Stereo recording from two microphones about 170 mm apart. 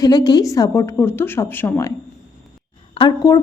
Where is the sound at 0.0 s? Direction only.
25° left (ahead or behind).